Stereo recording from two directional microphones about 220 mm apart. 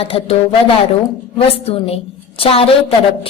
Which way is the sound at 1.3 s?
25° left (ahead or behind).